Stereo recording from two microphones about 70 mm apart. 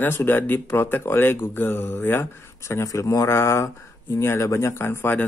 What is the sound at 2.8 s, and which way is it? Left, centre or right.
Speech, left.